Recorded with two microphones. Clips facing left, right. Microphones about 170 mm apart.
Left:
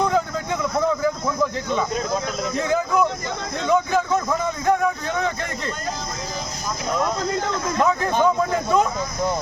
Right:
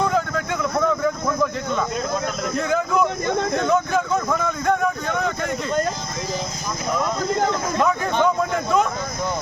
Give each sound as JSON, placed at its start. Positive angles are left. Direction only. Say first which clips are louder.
{"t": 2.6, "sound": "speech", "louder": "even", "side_deg": 0}
{"t": 3.7, "sound": "a sound", "louder": "left 5 dB", "side_deg": 0}
{"t": 7.8, "sound": "speech", "louder": "left 1 dB", "side_deg": 5}